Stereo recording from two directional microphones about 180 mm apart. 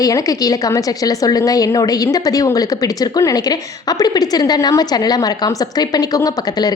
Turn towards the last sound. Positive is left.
turn(degrees=20)  # may be behind; listen again after turning